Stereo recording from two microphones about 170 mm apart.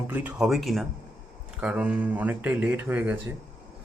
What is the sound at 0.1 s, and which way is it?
A man's voice, 10° right (ahead or behind).